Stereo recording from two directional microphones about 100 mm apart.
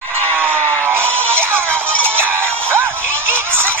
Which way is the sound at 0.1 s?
20° right (ahead or behind).